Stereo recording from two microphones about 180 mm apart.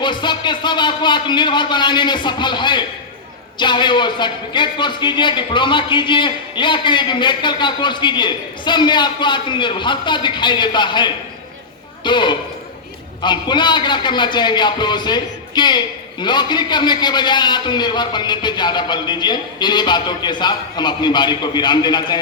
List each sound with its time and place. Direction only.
0.0 s a man's voice: 25° left (ahead or behind)